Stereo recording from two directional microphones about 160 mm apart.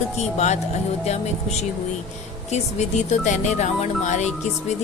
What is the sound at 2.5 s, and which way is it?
Speech, 45° left (ahead or behind).